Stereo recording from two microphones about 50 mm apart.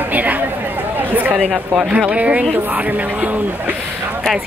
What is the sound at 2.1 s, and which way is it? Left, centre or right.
Speech, right.